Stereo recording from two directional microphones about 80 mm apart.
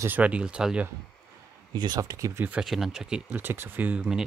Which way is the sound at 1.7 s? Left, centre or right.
Right.